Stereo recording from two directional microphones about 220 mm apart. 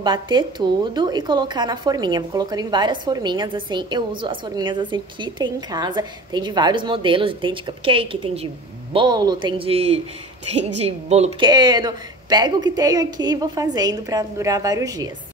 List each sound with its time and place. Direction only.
0.0 s a woman's voice: 20° right (ahead or behind)